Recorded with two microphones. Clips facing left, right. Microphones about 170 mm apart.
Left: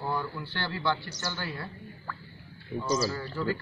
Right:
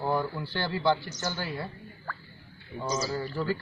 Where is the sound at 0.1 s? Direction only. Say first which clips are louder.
Right 4 dB; 15° right (ahead or behind).